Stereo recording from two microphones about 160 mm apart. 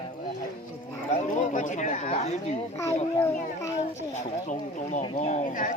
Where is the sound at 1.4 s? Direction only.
50° left (ahead or behind).